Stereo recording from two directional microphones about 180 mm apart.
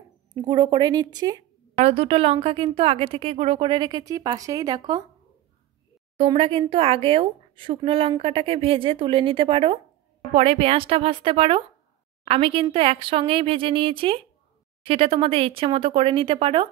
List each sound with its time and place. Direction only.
0.3 s speech: 25° right (ahead or behind)
1.8 s speech: 35° right (ahead or behind)
6.1 s speech: 30° right (ahead or behind)